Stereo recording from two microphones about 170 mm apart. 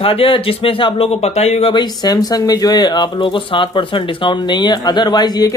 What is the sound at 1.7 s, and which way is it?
Speech, 25° left (ahead or behind).